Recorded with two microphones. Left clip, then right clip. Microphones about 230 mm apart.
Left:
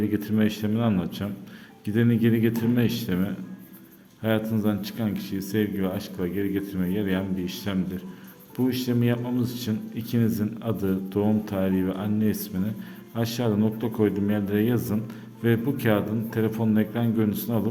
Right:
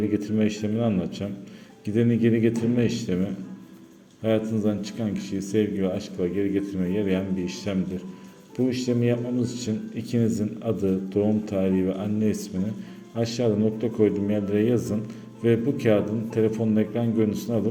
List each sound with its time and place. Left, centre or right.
0.1 s speech: centre